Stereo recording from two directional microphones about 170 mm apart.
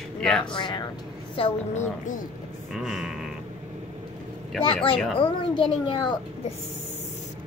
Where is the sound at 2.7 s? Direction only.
Centre (ahead or behind).